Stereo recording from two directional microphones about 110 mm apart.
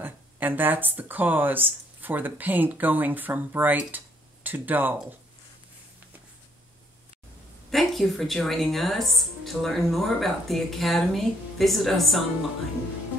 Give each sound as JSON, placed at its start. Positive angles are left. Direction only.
{"t": 0.0, "sound": "speech", "side_deg": -15}
{"t": 7.7, "sound": "speech", "side_deg": 0}